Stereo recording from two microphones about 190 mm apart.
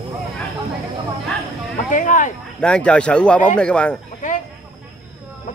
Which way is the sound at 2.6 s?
5° left (ahead or behind).